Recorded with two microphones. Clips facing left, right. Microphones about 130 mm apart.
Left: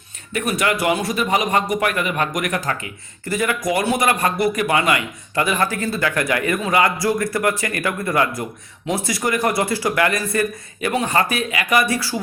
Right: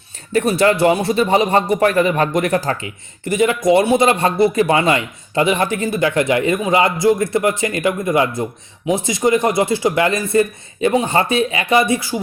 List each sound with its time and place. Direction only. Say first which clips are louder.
0.3 s a man's voice: right 7 dB; 30° right (ahead or behind)